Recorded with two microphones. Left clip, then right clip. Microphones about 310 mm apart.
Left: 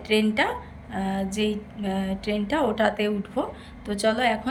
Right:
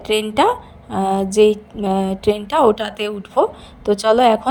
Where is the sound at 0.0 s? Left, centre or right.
Centre.